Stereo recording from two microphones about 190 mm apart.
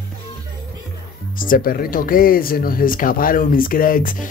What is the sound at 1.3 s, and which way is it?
Speech, 45° left (ahead or behind).